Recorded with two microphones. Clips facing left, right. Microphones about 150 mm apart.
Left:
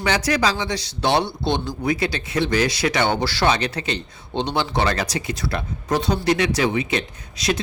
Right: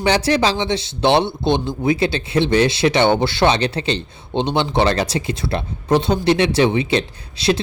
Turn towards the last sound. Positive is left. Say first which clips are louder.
# right 5 dB
turn(degrees=-30)  # may be behind; listen again after turning